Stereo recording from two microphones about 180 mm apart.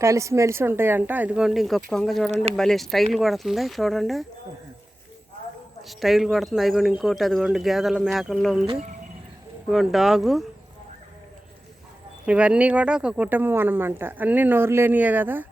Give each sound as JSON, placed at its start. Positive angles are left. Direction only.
{"t": 0.0, "sound": "speech", "side_deg": -15}
{"t": 2.3, "sound": "speech", "side_deg": -35}
{"t": 2.6, "sound": "speech", "side_deg": 0}
{"t": 5.9, "sound": "speech", "side_deg": 0}
{"t": 9.6, "sound": "speech", "side_deg": 0}
{"t": 12.2, "sound": "speech", "side_deg": -5}